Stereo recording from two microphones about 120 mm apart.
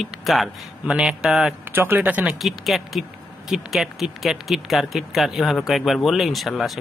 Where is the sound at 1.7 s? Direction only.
15° right (ahead or behind).